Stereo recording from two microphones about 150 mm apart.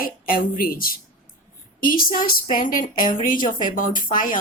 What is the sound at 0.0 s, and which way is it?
Speech, 70° left (ahead or behind).